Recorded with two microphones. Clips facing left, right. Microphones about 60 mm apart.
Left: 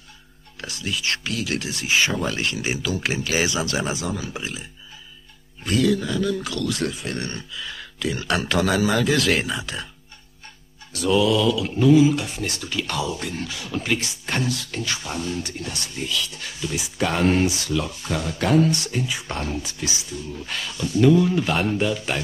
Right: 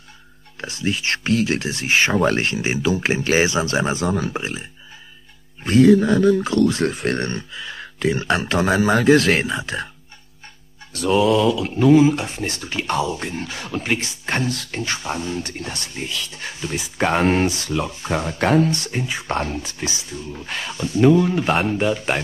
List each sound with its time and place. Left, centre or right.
0.6 s speech: right
2.5 s speech: right
7.0 s speech: right
7.2 s speech: right
10.9 s speech: right